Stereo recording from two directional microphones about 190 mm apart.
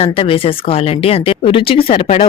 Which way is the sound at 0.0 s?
30° left (ahead or behind).